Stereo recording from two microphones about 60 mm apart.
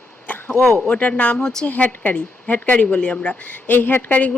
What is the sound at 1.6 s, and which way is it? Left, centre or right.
A woman's voice, left.